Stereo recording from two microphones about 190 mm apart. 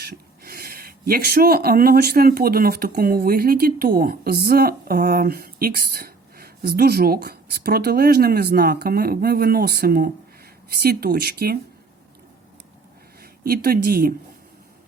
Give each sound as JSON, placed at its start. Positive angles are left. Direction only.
{"t": 0.0, "sound": "speech", "side_deg": -55}
{"t": 13.4, "sound": "speech", "side_deg": -55}